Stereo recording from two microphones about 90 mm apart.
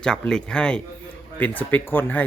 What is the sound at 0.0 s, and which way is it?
Speech, 10° left (ahead or behind).